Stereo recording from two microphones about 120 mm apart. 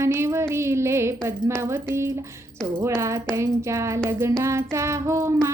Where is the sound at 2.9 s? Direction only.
25° right (ahead or behind).